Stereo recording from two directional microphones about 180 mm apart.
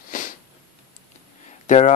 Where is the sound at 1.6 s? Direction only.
40° left (ahead or behind).